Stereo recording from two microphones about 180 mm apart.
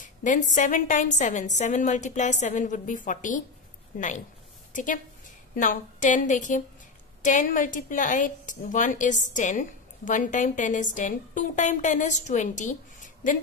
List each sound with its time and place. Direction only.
0.0 s a woman's voice: 45° left (ahead or behind)